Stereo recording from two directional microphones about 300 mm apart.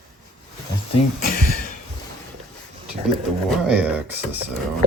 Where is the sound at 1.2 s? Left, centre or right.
Left.